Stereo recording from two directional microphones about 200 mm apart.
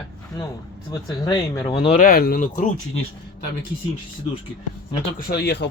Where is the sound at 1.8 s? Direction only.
40° left (ahead or behind).